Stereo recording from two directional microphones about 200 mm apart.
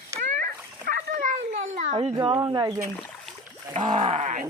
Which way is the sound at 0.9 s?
40° right (ahead or behind).